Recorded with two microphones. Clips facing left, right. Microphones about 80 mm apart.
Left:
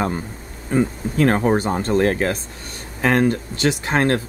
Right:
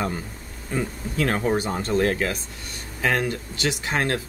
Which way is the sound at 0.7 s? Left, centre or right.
Left.